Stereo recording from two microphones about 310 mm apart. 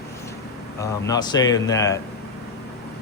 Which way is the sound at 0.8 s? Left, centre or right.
Centre.